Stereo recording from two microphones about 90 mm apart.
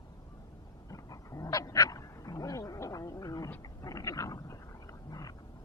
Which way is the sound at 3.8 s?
40° left (ahead or behind).